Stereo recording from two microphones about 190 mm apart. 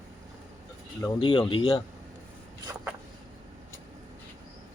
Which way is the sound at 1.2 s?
25° left (ahead or behind).